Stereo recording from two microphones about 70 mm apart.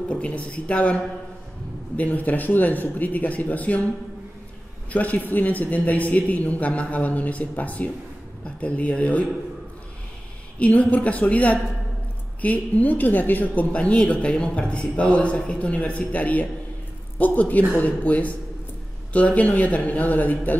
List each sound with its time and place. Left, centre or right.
0.1 s a woman's voice: centre
4.9 s a woman's voice: left
10.6 s a woman's voice: left